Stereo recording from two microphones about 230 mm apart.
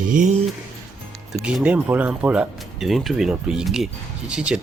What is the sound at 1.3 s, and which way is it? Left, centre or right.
Speech, centre.